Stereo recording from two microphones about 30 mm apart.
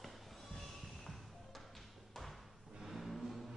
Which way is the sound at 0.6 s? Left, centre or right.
Centre.